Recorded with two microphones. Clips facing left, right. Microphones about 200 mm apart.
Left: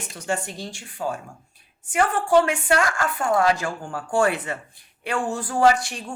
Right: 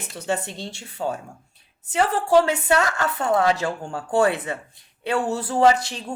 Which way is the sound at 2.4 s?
25° right (ahead or behind).